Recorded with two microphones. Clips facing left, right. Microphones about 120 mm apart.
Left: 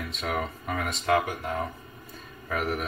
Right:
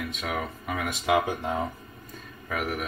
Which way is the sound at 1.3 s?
20° right (ahead or behind).